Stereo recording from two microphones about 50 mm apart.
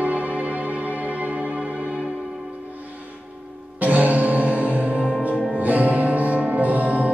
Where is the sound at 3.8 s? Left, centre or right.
Right.